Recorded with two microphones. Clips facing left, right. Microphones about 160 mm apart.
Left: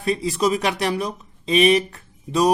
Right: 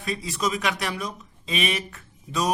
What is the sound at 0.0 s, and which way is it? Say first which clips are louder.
Speech: left 7 dB; 35° left (ahead or behind).